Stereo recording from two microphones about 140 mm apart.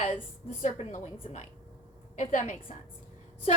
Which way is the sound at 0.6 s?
60° left (ahead or behind).